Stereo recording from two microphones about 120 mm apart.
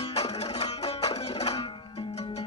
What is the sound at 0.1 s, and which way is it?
Music, 60° left (ahead or behind).